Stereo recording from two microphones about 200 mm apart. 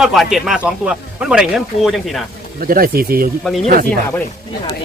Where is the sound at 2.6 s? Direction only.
45° right (ahead or behind).